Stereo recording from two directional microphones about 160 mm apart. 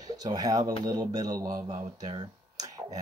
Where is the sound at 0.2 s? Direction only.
25° right (ahead or behind).